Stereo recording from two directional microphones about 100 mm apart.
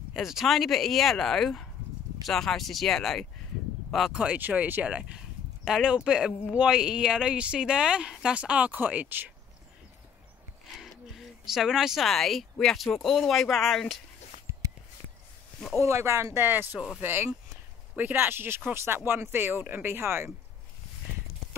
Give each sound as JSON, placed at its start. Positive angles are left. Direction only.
{"t": 0.1, "sound": "speech", "side_deg": -5}
{"t": 4.2, "sound": "speech", "side_deg": -15}
{"t": 10.7, "sound": "speech", "side_deg": 0}
{"t": 15.8, "sound": "speech", "side_deg": -30}